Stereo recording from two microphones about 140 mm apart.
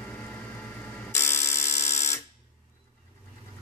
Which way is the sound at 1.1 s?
20° left (ahead or behind).